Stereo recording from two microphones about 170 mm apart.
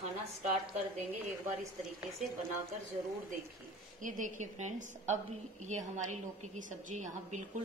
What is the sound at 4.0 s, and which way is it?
A woman's voice, 50° right (ahead or behind).